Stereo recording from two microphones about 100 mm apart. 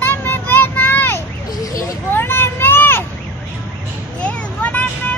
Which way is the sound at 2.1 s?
25° left (ahead or behind).